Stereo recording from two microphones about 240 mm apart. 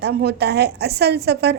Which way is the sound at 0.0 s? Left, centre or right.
Right.